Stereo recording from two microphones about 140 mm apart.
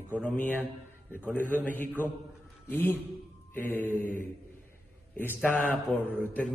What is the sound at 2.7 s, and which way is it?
A man's voice, 15° left (ahead or behind).